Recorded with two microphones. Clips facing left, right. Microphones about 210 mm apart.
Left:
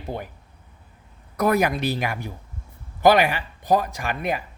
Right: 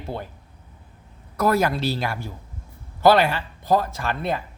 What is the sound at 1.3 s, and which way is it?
Speech, 15° left (ahead or behind).